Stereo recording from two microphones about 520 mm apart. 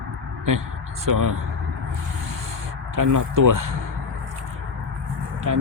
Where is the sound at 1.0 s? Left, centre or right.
Right.